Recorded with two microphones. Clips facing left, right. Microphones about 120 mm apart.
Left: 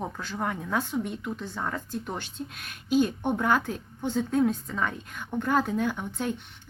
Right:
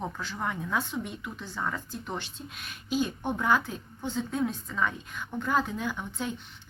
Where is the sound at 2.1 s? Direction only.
50° left (ahead or behind).